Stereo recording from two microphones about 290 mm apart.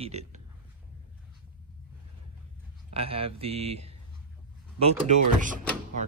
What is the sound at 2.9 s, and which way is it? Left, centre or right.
Speech, centre.